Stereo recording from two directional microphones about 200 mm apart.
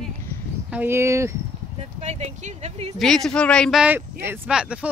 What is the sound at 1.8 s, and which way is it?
Speech, 35° right (ahead or behind).